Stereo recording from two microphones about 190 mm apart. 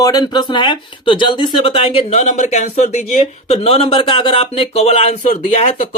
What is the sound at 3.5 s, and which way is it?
Speech, 30° left (ahead or behind).